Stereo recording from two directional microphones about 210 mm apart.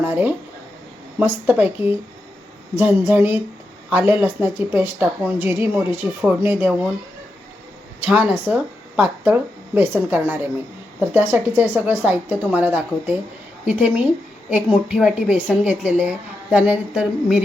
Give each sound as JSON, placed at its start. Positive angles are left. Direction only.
{"t": 0.0, "sound": "a woman's voice", "side_deg": -10}
{"t": 8.0, "sound": "a woman's voice", "side_deg": -5}
{"t": 14.8, "sound": "a woman's voice", "side_deg": 0}